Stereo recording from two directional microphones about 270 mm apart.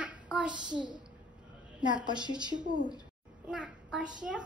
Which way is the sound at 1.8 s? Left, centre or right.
Centre.